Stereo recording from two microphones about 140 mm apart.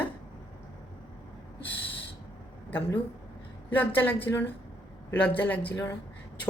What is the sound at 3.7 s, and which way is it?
Speech, 15° left (ahead or behind).